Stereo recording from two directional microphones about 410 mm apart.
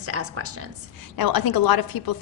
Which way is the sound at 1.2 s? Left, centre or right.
Left.